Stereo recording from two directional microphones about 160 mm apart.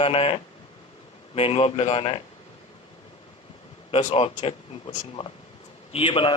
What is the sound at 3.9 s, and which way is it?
Speech, 45° left (ahead or behind).